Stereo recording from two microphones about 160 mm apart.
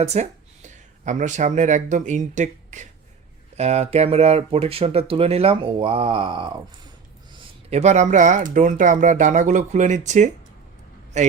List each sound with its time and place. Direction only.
0.0 s speech: 45° right (ahead or behind)
7.7 s a man's voice: 45° right (ahead or behind)